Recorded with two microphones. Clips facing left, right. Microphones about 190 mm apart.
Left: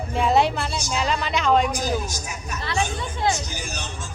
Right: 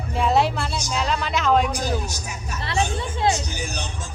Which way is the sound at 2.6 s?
25° right (ahead or behind).